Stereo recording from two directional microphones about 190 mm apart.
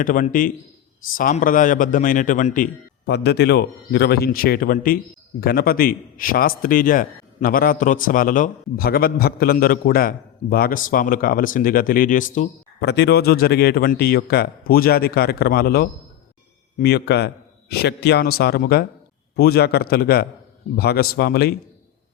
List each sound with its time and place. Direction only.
0.0 s a man's voice: 45° left (ahead or behind)
3.1 s a man's voice: 60° left (ahead or behind); by 12.5 s 45° left (ahead or behind)
12.8 s a man's voice: 65° left (ahead or behind)